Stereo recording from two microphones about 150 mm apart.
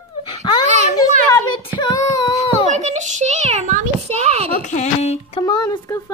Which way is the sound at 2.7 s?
50° right (ahead or behind).